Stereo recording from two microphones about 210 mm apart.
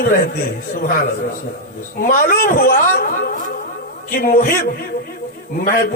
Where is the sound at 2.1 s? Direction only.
40° left (ahead or behind).